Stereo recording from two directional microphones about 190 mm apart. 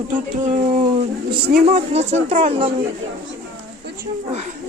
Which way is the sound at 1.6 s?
35° right (ahead or behind).